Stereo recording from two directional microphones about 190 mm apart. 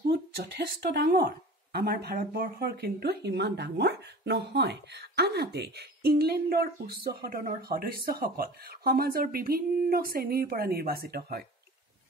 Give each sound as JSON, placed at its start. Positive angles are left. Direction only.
{"t": 0.1, "sound": "speech", "side_deg": -55}